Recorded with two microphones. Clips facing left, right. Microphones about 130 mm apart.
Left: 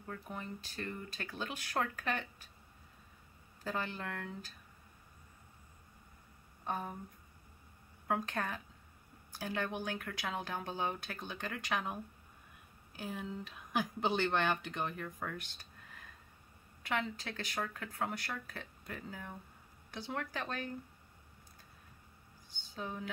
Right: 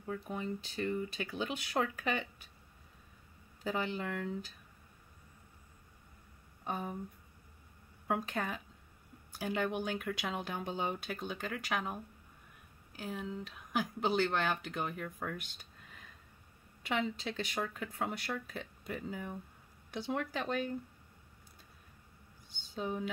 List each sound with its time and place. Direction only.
0.1 s speech: 10° right (ahead or behind)
3.6 s speech: 15° right (ahead or behind)
6.6 s speech: 10° right (ahead or behind)
8.1 s speech: 10° right (ahead or behind)
13.0 s speech: centre (ahead or behind)
16.8 s speech: 20° right (ahead or behind)
22.8 s speech: 15° right (ahead or behind)